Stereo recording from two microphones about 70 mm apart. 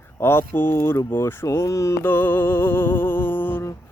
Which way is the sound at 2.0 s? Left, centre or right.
Left.